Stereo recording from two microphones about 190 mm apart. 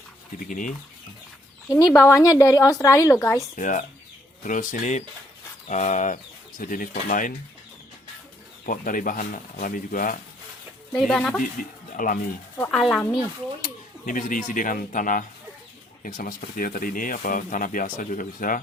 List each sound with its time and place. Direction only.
0.3 s speech: 45° left (ahead or behind)
1.7 s speech: 15° left (ahead or behind)
3.5 s speech: 40° left (ahead or behind)
8.6 s speech: 45° left (ahead or behind)
10.9 s speech: 5° left (ahead or behind)
11.9 s speech: 45° left (ahead or behind)
12.5 s speech: 5° left (ahead or behind)
14.0 s speech: 45° left (ahead or behind)